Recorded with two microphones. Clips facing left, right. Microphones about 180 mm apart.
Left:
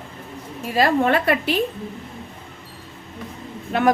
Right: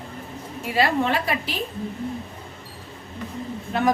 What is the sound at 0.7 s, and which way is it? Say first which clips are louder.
Speech: left 4 dB; 55° left (ahead or behind).